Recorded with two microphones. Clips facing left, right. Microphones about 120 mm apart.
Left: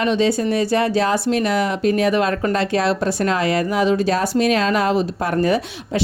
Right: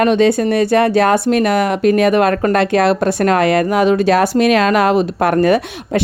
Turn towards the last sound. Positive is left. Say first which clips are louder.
# right 5 dB
turn(degrees=-65)  # may be behind; listen again after turning